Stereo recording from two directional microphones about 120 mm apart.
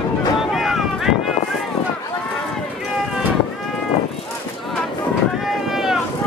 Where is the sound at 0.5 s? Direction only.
5° right (ahead or behind).